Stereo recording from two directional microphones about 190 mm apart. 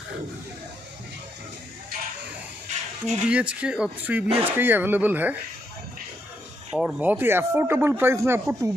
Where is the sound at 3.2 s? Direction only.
5° right (ahead or behind).